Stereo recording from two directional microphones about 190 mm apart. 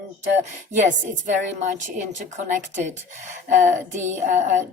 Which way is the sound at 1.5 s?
40° right (ahead or behind).